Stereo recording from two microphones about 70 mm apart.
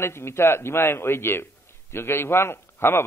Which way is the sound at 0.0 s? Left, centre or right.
Left.